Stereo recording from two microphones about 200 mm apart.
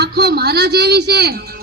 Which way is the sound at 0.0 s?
55° right (ahead or behind).